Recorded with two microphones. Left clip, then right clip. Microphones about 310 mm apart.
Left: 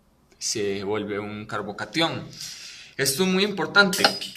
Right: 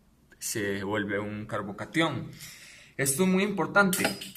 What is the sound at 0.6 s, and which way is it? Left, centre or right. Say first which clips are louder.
A man's voice: left 2 dB; right.